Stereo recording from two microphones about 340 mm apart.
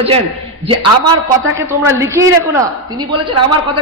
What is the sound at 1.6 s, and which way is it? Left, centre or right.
Speech, centre.